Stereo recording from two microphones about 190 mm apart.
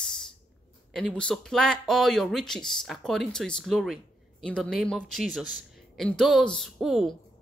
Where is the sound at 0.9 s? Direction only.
5° left (ahead or behind).